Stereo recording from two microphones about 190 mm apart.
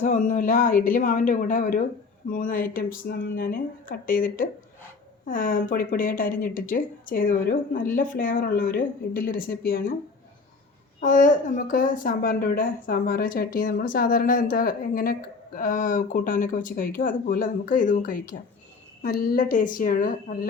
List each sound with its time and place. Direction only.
0.0 s a woman's voice: 40° left (ahead or behind)
11.0 s a woman's voice: 45° left (ahead or behind)